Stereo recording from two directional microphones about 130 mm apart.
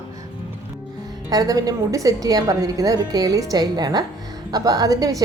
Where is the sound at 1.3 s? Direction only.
30° right (ahead or behind).